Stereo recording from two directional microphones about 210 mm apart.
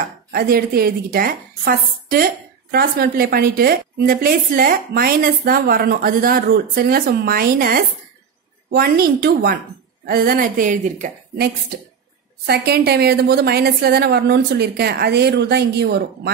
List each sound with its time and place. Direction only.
0.3 s a woman's voice: 45° right (ahead or behind)
12.4 s a woman's voice: 50° right (ahead or behind)